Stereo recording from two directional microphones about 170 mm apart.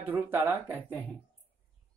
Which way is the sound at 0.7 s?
10° left (ahead or behind).